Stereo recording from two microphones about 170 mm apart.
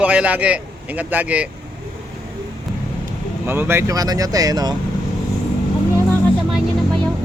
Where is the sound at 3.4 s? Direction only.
10° right (ahead or behind).